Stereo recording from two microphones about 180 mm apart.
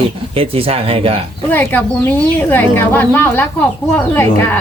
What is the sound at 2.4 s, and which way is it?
Speech, 10° left (ahead or behind).